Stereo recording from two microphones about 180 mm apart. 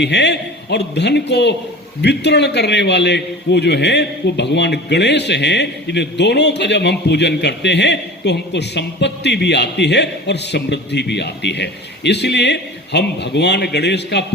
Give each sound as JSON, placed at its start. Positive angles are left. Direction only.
{"t": 0.0, "sound": "a man's voice", "side_deg": 70}